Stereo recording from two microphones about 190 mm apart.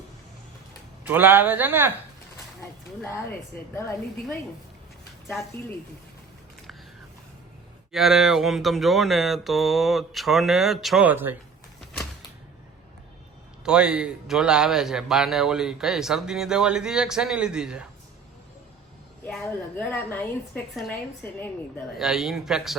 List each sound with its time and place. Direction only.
1.0 s speech: 10° right (ahead or behind)
2.6 s a sound: 15° left (ahead or behind)
3.8 s a woman's voice: 15° left (ahead or behind)
7.9 s speech: centre (ahead or behind)
13.7 s speech: 5° right (ahead or behind)
19.2 s a woman's voice: 10° left (ahead or behind)
21.9 s speech: centre (ahead or behind)